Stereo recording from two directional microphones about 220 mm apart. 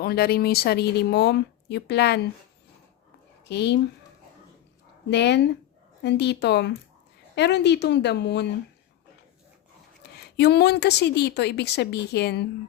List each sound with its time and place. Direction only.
0.0 s speech: 45° left (ahead or behind)
3.5 s speech: 50° left (ahead or behind)
5.0 s speech: 50° left (ahead or behind)
10.0 s speech: 50° left (ahead or behind)